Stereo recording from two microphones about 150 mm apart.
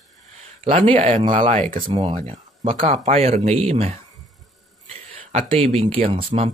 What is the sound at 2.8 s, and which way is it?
Speech, 50° right (ahead or behind).